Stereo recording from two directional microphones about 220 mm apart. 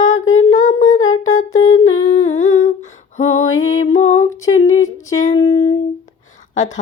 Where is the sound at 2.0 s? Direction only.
30° left (ahead or behind).